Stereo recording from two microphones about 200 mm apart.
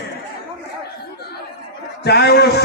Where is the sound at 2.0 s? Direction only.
55° left (ahead or behind).